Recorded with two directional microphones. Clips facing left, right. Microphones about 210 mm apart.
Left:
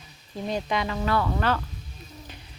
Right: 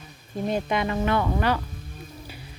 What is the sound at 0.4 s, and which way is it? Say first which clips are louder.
Speech: right 2 dB; 50° right (ahead or behind).